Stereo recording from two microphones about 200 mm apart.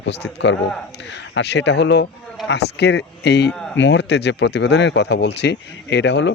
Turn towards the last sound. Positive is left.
turn(degrees=60)  # may be behind; listen again after turning